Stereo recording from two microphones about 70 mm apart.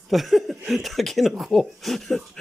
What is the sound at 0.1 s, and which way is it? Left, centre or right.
Speech, centre.